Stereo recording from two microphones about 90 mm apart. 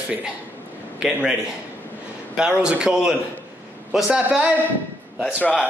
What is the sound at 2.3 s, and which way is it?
A man's voice, 10° right (ahead or behind).